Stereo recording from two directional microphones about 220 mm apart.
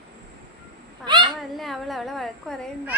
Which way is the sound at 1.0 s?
20° right (ahead or behind).